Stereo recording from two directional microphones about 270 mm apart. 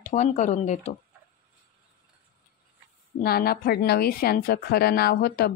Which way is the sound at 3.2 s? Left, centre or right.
Left.